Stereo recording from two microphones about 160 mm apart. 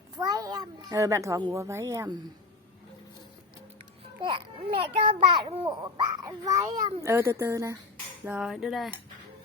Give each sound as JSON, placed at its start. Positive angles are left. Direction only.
{"t": 0.2, "sound": "a child's voice", "side_deg": -25}
{"t": 4.2, "sound": "a child's voice", "side_deg": -30}
{"t": 8.2, "sound": "a sound", "side_deg": -5}